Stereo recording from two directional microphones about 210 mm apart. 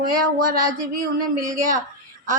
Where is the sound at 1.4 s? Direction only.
40° right (ahead or behind).